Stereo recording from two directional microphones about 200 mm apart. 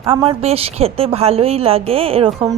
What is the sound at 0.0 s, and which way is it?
A woman's voice, 25° right (ahead or behind).